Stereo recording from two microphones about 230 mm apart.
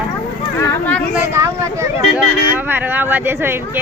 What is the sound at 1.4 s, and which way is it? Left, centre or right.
Speech, centre.